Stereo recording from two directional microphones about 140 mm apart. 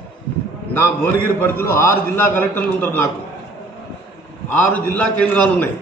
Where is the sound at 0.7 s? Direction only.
15° left (ahead or behind).